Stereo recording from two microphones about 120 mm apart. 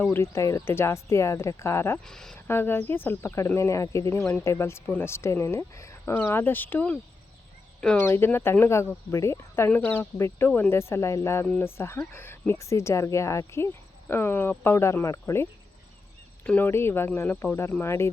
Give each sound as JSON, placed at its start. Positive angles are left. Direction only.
{"t": 0.0, "sound": "speech", "side_deg": 20}
{"t": 2.0, "sound": "speech", "side_deg": 5}
{"t": 2.5, "sound": "speech", "side_deg": 20}
{"t": 4.2, "sound": "speech", "side_deg": 5}
{"t": 4.4, "sound": "speech", "side_deg": 20}
{"t": 8.0, "sound": "speech", "side_deg": 20}
{"t": 16.4, "sound": "speech", "side_deg": 15}